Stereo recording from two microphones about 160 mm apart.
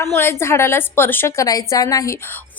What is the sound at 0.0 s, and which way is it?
A woman's voice, 15° left (ahead or behind).